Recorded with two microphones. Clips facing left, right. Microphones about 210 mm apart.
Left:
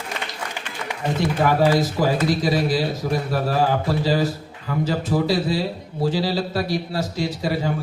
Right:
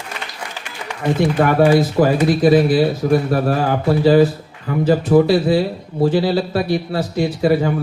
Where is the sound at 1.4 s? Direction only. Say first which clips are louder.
Right 4 dB; 55° right (ahead or behind).